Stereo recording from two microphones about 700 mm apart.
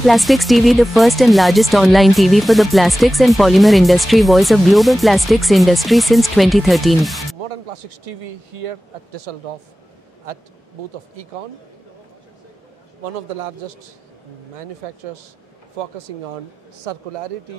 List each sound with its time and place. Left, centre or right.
0.0 s speech: centre
7.4 s speech: right
13.0 s a man's voice: right
14.8 s a man's voice: right